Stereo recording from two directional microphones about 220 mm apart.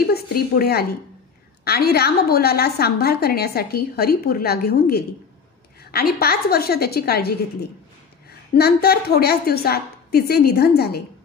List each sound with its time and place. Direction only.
0.0 s a woman's voice: 45° left (ahead or behind)